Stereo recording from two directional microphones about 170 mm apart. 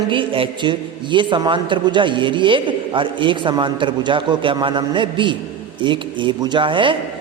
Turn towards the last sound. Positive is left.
turn(degrees=-30)  # may be behind; listen again after turning